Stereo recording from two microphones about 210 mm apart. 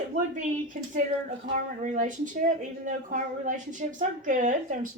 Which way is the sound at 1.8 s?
35° right (ahead or behind).